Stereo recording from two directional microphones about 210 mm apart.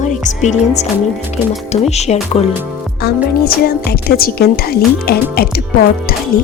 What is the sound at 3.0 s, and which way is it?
A woman's voice, 50° left (ahead or behind).